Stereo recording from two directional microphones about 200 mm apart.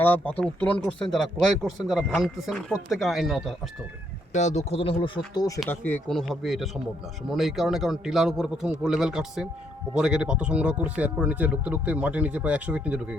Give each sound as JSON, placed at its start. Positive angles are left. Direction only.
{"t": 0.0, "sound": "speech", "side_deg": 5}
{"t": 4.3, "sound": "speech", "side_deg": 35}